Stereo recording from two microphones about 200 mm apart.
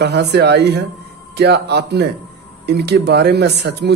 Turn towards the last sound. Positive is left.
turn(degrees=-55)  # may be behind; listen again after turning